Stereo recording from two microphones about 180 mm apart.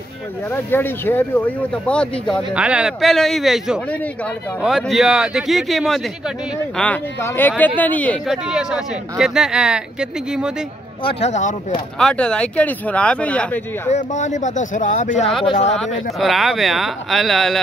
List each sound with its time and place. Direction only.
0.5 s speech: 10° left (ahead or behind)
2.5 s speech: 5° right (ahead or behind)
6.8 s speech: 10° left (ahead or behind)
8.5 s speech: 5° right (ahead or behind)
11.1 s speech: 35° left (ahead or behind)
12.0 s speech: 5° left (ahead or behind)
13.8 s speech: 40° left (ahead or behind)
15.8 s speech: centre (ahead or behind)